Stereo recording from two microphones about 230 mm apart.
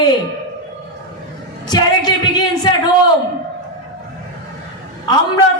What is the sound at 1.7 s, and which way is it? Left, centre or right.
Music, centre.